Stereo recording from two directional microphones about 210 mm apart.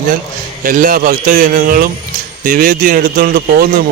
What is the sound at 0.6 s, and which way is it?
A man's voice, 40° right (ahead or behind).